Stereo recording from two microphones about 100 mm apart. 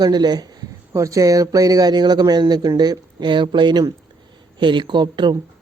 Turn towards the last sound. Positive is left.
turn(degrees=-50)  # may be behind; listen again after turning